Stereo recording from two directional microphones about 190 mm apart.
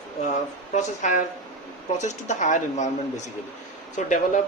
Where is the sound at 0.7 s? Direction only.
40° left (ahead or behind).